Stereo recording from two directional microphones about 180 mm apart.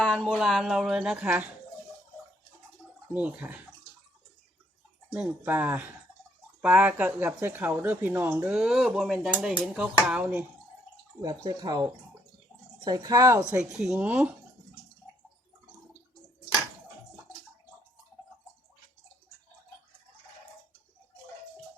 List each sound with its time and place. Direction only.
0.1 s speech: centre (ahead or behind)
3.1 s speech: 10° right (ahead or behind)
5.1 s speech: 10° right (ahead or behind)
11.4 s speech: 25° right (ahead or behind)
13.5 s speech: 5° right (ahead or behind)